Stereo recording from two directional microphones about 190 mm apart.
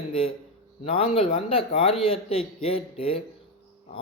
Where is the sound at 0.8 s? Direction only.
30° left (ahead or behind).